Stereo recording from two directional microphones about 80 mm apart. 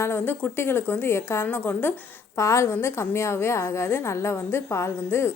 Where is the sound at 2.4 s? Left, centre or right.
Left.